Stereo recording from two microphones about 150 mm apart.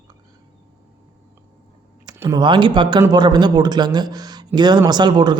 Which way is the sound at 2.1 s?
15° right (ahead or behind).